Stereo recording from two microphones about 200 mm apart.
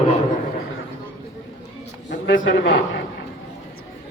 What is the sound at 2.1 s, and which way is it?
Speech, 65° left (ahead or behind).